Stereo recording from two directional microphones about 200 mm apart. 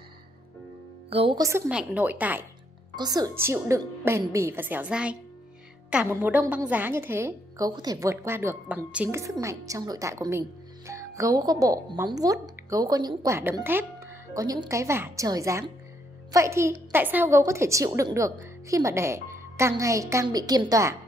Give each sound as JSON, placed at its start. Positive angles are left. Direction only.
{"t": 1.1, "sound": "speech", "side_deg": -25}
{"t": 1.7, "sound": "a woman's voice", "side_deg": -5}
{"t": 3.0, "sound": "a woman's voice", "side_deg": -20}